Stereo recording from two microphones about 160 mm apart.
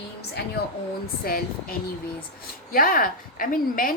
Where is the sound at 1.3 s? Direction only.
65° left (ahead or behind).